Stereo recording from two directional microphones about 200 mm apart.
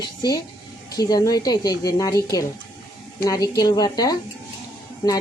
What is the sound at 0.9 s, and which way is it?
A woman's voice, 20° left (ahead or behind).